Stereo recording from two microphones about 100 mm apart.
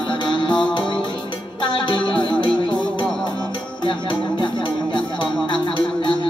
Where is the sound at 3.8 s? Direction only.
55° left (ahead or behind).